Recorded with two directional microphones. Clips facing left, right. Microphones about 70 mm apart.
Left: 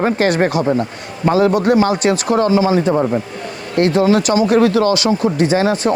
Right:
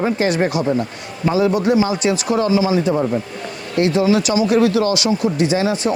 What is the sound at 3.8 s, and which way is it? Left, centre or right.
Speech, left.